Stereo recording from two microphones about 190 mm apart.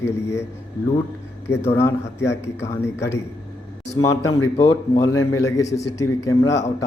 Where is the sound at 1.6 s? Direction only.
15° left (ahead or behind).